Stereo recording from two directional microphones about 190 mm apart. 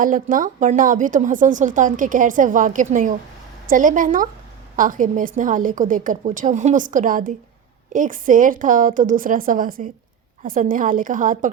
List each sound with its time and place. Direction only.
0.0 s a woman's voice: 45° right (ahead or behind)